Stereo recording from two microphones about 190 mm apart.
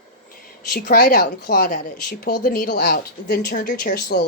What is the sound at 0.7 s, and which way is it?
Speech, 50° left (ahead or behind).